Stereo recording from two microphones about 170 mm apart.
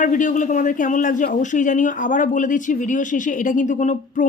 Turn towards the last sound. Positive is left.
turn(degrees=45)  # may be behind; listen again after turning